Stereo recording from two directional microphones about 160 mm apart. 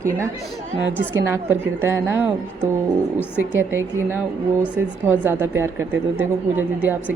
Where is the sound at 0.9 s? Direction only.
15° right (ahead or behind).